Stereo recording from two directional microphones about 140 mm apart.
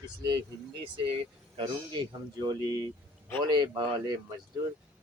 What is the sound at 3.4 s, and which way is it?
Speech, 30° right (ahead or behind).